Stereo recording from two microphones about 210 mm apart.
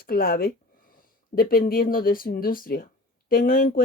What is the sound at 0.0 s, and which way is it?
Speech, 45° left (ahead or behind).